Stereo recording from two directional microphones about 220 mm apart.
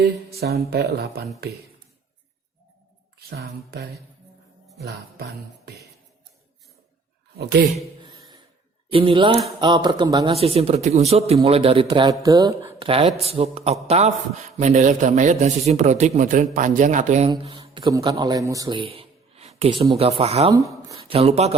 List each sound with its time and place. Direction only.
0.0 s music: 45° right (ahead or behind)
3.2 s music: 45° right (ahead or behind)
8.0 s a sound: 15° right (ahead or behind)
8.9 s a man's voice: 25° right (ahead or behind)
20.5 s speech: 15° right (ahead or behind)
21.2 s a man's voice: 30° right (ahead or behind)